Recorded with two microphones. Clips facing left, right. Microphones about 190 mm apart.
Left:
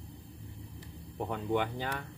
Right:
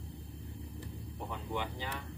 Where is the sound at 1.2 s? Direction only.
55° left (ahead or behind).